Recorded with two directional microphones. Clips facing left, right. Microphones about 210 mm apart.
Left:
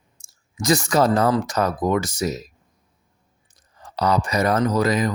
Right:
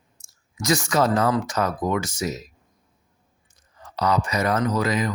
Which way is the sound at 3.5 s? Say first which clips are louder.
Left 2 dB; 35° left (ahead or behind).